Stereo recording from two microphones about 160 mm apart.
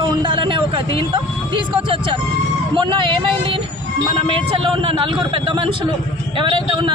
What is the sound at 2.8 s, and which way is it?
Speech, 30° right (ahead or behind).